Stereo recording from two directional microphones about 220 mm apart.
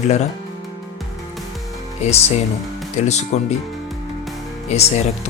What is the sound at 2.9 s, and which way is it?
Speech, 30° left (ahead or behind).